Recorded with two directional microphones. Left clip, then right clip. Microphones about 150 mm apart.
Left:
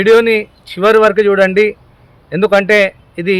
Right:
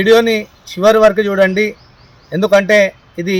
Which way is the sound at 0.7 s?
30° left (ahead or behind).